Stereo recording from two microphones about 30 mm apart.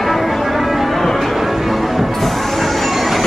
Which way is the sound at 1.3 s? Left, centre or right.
Centre.